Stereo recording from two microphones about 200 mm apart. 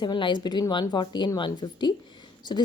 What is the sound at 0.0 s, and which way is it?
A woman's voice, 20° left (ahead or behind).